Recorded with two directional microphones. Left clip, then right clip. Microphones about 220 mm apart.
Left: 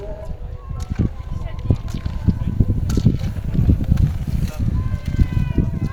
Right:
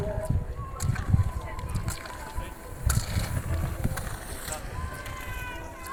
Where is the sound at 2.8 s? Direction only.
Centre (ahead or behind).